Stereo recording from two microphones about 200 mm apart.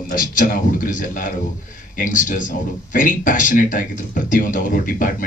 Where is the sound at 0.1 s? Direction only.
45° left (ahead or behind).